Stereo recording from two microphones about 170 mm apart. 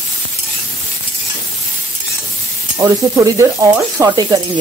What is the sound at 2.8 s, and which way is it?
Speech, 20° right (ahead or behind).